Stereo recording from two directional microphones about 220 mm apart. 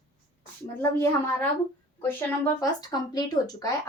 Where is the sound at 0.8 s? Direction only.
10° left (ahead or behind).